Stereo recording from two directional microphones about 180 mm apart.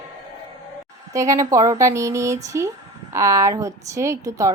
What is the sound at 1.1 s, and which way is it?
A woman's voice, 15° right (ahead or behind).